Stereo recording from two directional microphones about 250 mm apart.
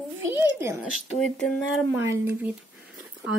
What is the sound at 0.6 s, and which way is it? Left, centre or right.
A woman's voice, centre.